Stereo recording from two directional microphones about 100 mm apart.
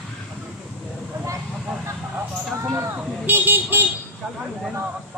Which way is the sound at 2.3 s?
25° right (ahead or behind).